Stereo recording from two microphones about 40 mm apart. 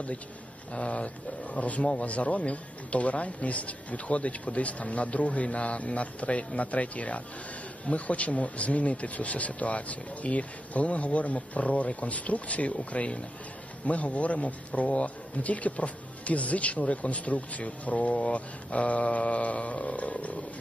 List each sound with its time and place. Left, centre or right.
0.7 s speech: left